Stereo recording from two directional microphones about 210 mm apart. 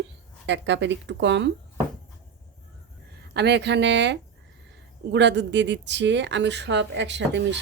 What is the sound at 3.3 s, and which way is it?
Speech, 55° right (ahead or behind).